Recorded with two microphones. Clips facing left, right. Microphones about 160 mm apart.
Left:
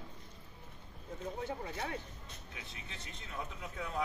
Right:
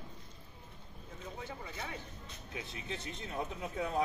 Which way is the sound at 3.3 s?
45° right (ahead or behind).